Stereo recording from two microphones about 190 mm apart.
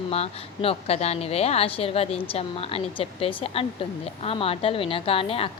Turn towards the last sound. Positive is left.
turn(degrees=30)  # may be behind; listen again after turning